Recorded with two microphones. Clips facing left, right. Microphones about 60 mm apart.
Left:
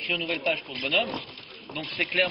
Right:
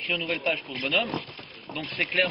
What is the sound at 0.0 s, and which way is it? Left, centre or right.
A man's voice, centre.